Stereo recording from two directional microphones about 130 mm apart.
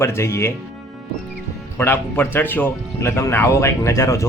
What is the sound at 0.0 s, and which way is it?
Speech, 20° left (ahead or behind).